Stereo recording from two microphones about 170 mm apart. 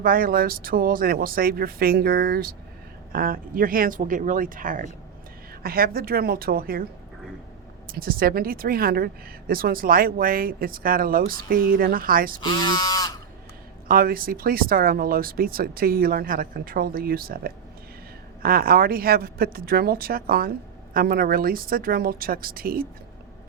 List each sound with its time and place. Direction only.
0.0 s speech: 55° right (ahead or behind)
7.9 s speech: 60° right (ahead or behind)
12.4 s goose: 25° left (ahead or behind)
13.8 s speech: 60° right (ahead or behind)